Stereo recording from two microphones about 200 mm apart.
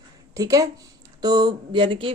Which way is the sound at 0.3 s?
15° right (ahead or behind).